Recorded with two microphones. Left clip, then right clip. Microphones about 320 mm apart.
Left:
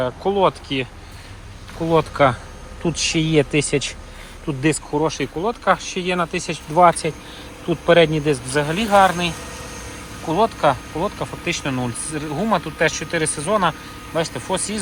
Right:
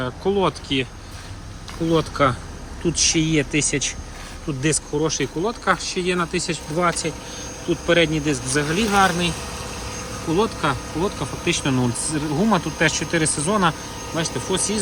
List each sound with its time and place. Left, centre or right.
0.0 s a man's voice: centre
1.9 s speech: centre
5.2 s a man's voice: centre
6.7 s a man's voice: centre
10.3 s a man's voice: centre